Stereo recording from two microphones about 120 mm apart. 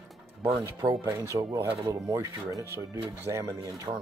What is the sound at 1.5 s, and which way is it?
Speech, 40° right (ahead or behind).